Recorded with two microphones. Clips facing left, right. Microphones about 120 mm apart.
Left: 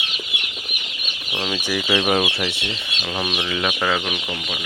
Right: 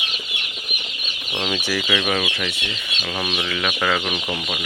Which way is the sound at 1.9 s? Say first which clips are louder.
Left 5 dB; 25° left (ahead or behind).